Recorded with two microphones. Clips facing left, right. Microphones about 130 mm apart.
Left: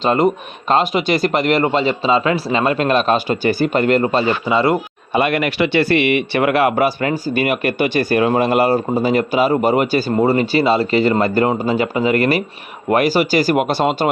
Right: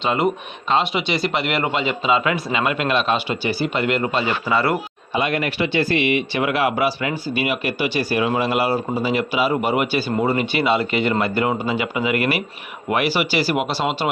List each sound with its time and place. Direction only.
0.0 s a man's voice: 40° left (ahead or behind)
4.4 s speech: 20° left (ahead or behind)
5.1 s a man's voice: 65° left (ahead or behind); by 14.1 s 50° left (ahead or behind)